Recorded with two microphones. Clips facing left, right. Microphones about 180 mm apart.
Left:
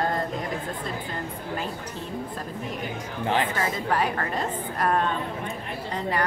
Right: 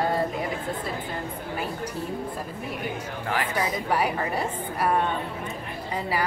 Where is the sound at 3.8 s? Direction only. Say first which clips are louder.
Even; 10° right (ahead or behind).